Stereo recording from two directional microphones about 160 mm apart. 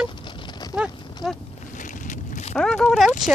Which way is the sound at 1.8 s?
50° left (ahead or behind).